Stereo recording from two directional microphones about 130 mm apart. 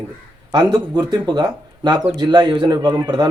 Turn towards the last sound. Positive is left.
turn(degrees=-30)  # may be behind; listen again after turning